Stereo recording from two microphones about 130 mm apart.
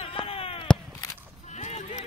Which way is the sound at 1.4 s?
60° left (ahead or behind).